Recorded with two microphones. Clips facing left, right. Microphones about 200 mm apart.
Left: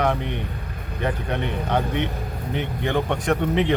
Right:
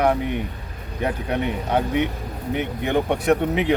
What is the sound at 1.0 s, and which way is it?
Speech, 10° right (ahead or behind).